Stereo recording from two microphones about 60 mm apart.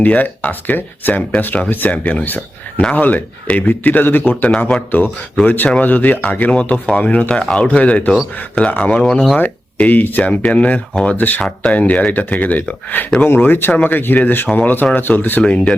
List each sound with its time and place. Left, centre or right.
0.0 s speech: left
4.4 s speech: left
9.4 s speech: left